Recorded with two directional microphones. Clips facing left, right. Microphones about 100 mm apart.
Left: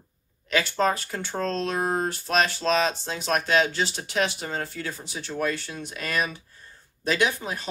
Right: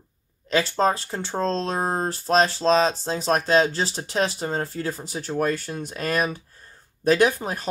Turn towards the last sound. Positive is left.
turn(degrees=-40)  # may be behind; listen again after turning